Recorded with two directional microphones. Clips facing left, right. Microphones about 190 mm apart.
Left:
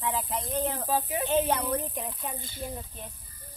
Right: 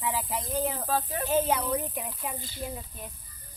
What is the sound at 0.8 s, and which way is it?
Speech, 10° left (ahead or behind).